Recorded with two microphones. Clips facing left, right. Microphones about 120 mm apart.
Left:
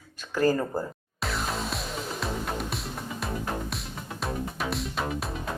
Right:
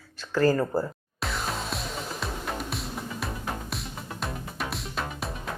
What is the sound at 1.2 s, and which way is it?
Music, centre (ahead or behind).